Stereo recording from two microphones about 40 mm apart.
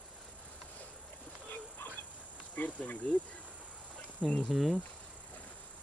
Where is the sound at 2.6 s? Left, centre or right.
Left.